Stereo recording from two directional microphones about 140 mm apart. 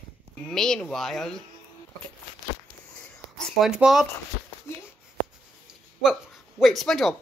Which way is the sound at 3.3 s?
Centre (ahead or behind).